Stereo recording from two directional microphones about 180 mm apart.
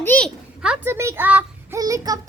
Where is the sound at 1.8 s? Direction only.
20° right (ahead or behind).